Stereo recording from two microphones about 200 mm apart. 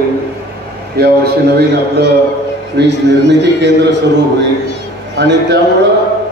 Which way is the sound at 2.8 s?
60° right (ahead or behind).